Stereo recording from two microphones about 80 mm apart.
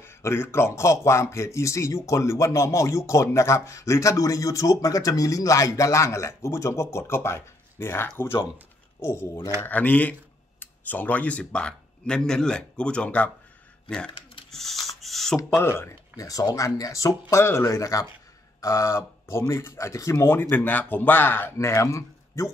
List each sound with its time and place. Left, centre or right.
0.0 s speech: left
9.6 s speech: left; by 15.3 s centre
15.8 s speech: left